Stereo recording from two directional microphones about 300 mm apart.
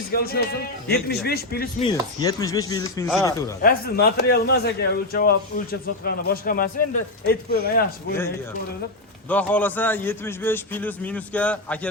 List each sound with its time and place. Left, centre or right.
0.1 s a man's voice: left
1.8 s chopping: centre
3.6 s a man's voice: left
9.3 s a man's voice: centre